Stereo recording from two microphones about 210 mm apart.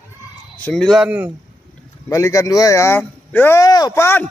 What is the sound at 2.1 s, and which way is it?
Speech, 15° left (ahead or behind).